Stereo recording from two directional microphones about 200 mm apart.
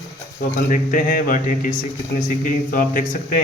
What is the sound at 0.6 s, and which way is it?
A man's voice, 40° left (ahead or behind).